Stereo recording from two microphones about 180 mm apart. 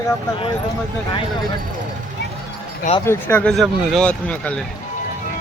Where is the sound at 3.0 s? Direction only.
15° left (ahead or behind).